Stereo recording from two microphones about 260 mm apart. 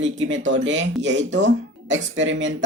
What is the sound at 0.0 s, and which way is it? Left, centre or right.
Speech, right.